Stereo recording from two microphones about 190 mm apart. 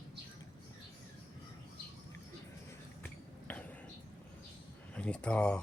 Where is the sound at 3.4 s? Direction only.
10° left (ahead or behind).